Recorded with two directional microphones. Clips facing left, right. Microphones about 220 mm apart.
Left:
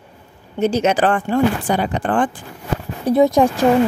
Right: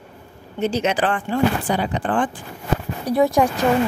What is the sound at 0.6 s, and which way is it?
Speech, 45° left (ahead or behind).